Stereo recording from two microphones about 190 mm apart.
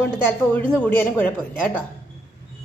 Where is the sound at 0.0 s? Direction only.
10° left (ahead or behind).